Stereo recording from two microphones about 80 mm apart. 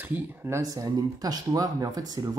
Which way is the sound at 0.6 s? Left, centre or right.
Right.